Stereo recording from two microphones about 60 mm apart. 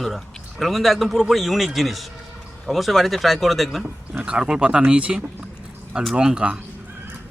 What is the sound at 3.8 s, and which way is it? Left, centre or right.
Speech, centre.